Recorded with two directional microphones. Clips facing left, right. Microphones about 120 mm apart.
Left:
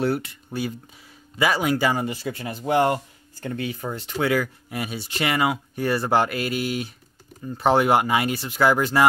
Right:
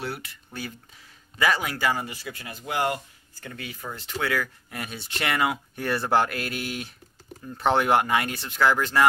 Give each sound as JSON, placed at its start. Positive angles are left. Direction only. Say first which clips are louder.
{"t": 0.5, "sound": "speech", "louder": "left 8 dB", "side_deg": 15}